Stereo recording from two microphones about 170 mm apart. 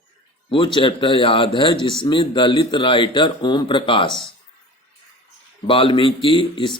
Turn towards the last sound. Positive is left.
turn(degrees=30)  # may be behind; listen again after turning